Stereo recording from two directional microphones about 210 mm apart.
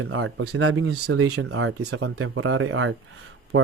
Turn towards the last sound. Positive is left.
turn(degrees=-65)  # may be behind; listen again after turning